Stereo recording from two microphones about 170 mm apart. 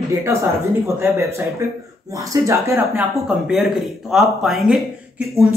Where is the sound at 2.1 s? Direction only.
20° right (ahead or behind).